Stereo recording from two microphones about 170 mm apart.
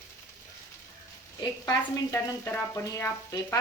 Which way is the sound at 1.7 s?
15° left (ahead or behind).